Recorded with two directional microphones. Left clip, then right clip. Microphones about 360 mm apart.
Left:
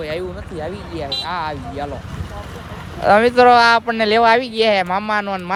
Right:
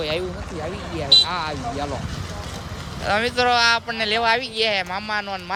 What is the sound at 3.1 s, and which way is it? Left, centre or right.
Speech, centre.